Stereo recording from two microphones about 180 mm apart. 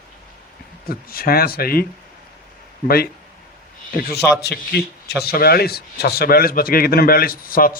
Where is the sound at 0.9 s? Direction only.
55° left (ahead or behind).